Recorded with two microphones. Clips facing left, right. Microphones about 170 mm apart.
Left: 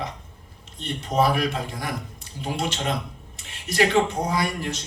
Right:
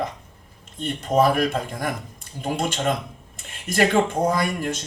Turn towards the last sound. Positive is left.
turn(degrees=-50)  # may be behind; listen again after turning